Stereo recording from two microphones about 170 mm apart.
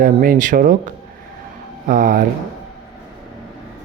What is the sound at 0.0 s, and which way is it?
Speech, 55° right (ahead or behind).